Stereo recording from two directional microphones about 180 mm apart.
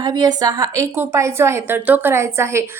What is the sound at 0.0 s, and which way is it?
A woman's voice, 25° right (ahead or behind).